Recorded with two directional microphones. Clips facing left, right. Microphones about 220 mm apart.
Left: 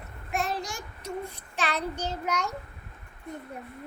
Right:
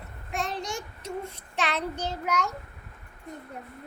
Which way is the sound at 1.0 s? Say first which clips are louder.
Even; 25° right (ahead or behind).